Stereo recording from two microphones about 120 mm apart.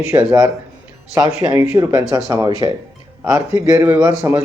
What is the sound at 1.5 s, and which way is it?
Speech, 25° right (ahead or behind).